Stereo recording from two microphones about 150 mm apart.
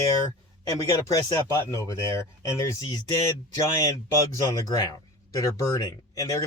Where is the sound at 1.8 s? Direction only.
20° left (ahead or behind).